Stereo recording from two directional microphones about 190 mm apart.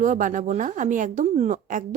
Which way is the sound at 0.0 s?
45° right (ahead or behind).